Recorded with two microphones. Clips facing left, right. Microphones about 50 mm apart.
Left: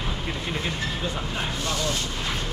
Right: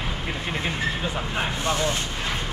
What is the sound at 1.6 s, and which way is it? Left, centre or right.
Speech, right.